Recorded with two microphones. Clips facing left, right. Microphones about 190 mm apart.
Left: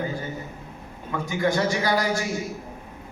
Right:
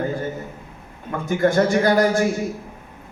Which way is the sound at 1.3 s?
50° right (ahead or behind).